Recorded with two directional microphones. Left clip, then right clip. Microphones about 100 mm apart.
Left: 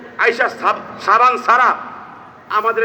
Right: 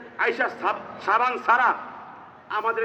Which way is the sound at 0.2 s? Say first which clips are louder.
Left 9 dB; 35° right (ahead or behind).